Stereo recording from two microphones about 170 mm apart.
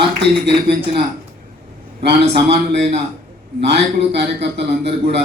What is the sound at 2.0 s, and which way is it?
A man's voice, 80° right.